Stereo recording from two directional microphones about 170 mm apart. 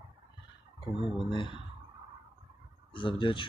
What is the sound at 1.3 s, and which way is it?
Speech, 30° left (ahead or behind).